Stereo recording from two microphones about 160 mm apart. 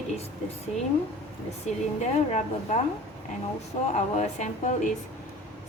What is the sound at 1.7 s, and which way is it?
Speech, 45° left (ahead or behind).